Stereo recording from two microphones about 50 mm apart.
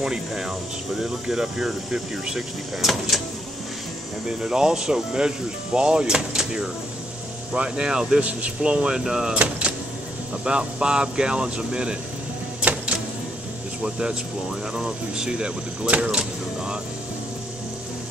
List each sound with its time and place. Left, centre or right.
0.0 s speech: centre
4.3 s speech: centre
12.6 s a sound: right
13.8 s speech: centre